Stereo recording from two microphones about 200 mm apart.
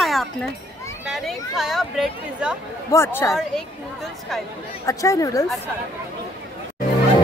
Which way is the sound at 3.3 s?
Centre (ahead or behind).